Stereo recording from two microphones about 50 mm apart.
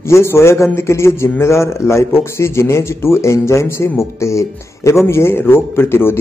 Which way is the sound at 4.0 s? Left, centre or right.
Left.